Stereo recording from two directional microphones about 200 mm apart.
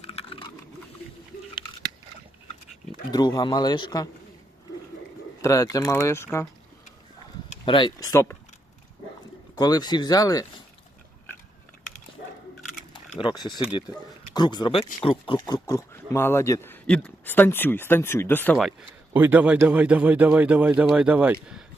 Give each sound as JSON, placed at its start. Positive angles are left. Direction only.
{"t": 0.0, "sound": "chewing", "side_deg": 30}
{"t": 3.1, "sound": "speech", "side_deg": 20}
{"t": 5.4, "sound": "speech", "side_deg": 15}
{"t": 7.5, "sound": "speech", "side_deg": 25}
{"t": 9.6, "sound": "speech", "side_deg": 20}
{"t": 13.1, "sound": "speech", "side_deg": 25}
{"t": 19.1, "sound": "speech", "side_deg": -10}